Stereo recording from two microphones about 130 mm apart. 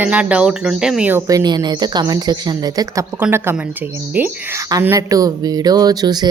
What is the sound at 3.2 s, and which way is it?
Speech, 15° right (ahead or behind).